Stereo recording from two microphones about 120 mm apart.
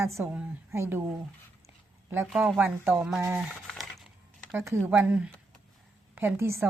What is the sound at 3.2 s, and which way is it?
Speech, 20° right (ahead or behind).